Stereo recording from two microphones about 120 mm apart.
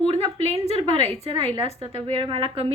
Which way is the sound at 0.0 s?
55° right (ahead or behind).